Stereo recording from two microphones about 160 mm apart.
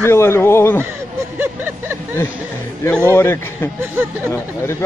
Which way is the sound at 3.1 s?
15° left (ahead or behind).